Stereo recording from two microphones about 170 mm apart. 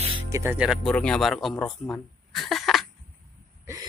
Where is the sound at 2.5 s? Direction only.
Centre (ahead or behind).